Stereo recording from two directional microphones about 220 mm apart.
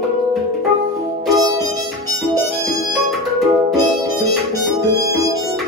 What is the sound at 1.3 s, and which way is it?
Harmonica, 15° right (ahead or behind).